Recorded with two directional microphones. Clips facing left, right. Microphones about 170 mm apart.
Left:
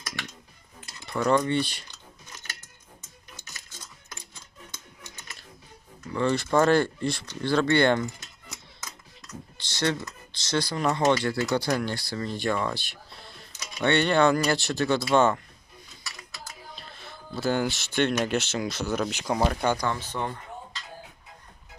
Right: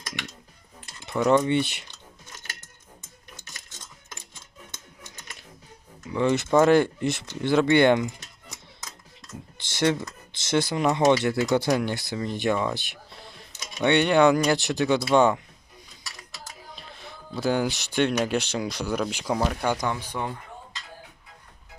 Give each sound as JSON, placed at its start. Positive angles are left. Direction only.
{"t": 1.0, "sound": "speech", "side_deg": -20}
{"t": 6.1, "sound": "speech", "side_deg": -15}
{"t": 9.6, "sound": "speech", "side_deg": -20}
{"t": 13.8, "sound": "speech", "side_deg": -15}
{"t": 16.7, "sound": "speech", "side_deg": -15}
{"t": 19.7, "sound": "speech", "side_deg": -15}